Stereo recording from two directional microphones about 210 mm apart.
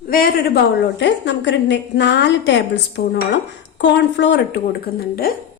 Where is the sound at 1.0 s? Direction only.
55° left (ahead or behind).